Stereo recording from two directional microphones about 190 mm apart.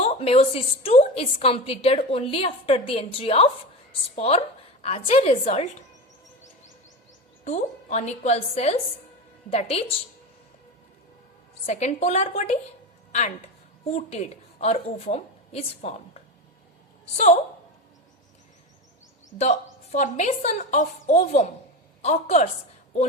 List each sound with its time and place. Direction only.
0.0 s a woman's voice: 30° left (ahead or behind)
7.4 s a woman's voice: 35° left (ahead or behind)
11.6 s a woman's voice: 35° left (ahead or behind)
13.1 s a sound: 40° left (ahead or behind)
13.8 s a woman's voice: 35° left (ahead or behind)
19.4 s a woman's voice: 40° left (ahead or behind)